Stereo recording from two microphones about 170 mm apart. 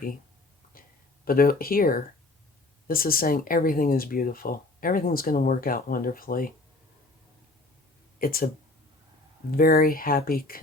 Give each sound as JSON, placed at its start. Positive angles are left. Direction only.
{"t": 1.2, "sound": "speech", "side_deg": 60}
{"t": 8.2, "sound": "speech", "side_deg": 60}
{"t": 9.5, "sound": "speech", "side_deg": 60}